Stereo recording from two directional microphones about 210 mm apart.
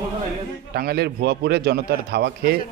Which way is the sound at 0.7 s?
50° right (ahead or behind).